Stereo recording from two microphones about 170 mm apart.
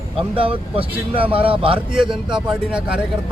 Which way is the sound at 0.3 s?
30° right (ahead or behind).